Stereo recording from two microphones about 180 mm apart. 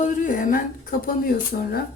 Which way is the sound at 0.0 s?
45° left (ahead or behind).